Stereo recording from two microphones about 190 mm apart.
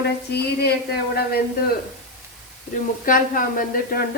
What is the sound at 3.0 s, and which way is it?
Speech, 45° left (ahead or behind).